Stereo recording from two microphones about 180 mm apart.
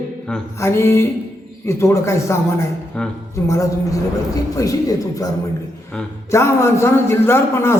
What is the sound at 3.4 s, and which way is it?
A man's voice, 15° left (ahead or behind).